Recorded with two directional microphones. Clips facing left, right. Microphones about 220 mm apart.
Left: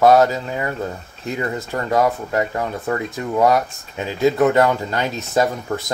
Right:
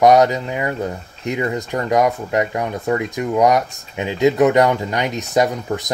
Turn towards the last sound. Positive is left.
turn(degrees=-15)  # may be behind; listen again after turning